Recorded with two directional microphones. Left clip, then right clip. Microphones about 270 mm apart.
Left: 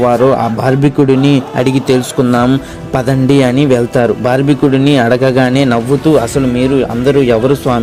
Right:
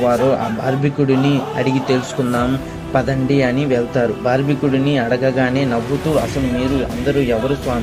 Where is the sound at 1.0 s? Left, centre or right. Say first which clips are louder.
Left 6 dB; left.